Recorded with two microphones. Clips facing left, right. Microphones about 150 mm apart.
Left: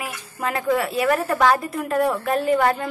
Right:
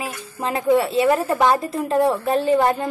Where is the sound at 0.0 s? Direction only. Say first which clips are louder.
Right 1 dB; 30° right (ahead or behind).